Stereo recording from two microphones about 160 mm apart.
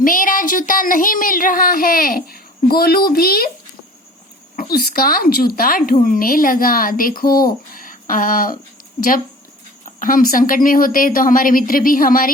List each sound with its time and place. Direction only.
0.0 s speech: 60° left (ahead or behind)
4.5 s speech: 65° left (ahead or behind)
9.8 s a sound: 55° left (ahead or behind)
10.3 s speech: 60° left (ahead or behind)